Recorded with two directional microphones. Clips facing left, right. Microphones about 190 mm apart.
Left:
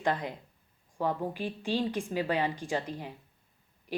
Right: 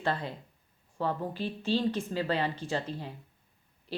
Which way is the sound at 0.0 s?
15° left (ahead or behind).